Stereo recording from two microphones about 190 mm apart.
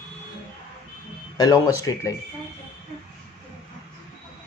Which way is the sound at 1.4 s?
20° left (ahead or behind).